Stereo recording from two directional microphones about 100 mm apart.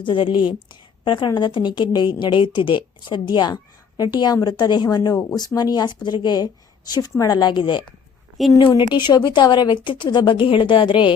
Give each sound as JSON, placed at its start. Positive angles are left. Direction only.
{"t": 0.0, "sound": "a woman's voice", "side_deg": 55}